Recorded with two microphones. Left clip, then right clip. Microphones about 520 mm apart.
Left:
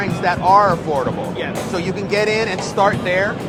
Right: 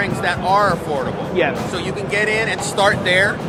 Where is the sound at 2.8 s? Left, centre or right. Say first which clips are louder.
Right 1 dB; left.